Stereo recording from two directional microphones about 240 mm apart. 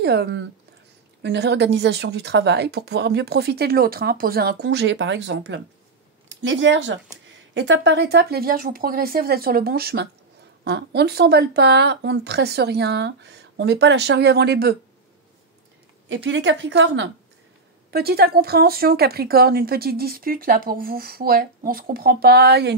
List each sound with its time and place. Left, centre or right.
0.0 s speech: right
16.1 s speech: right